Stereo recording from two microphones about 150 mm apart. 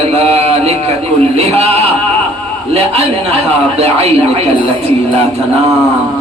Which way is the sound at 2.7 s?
40° right (ahead or behind).